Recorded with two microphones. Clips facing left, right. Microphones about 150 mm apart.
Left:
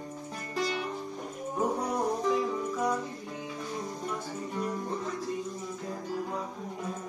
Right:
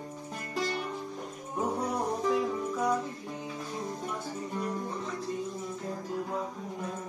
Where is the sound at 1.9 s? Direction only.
Centre (ahead or behind).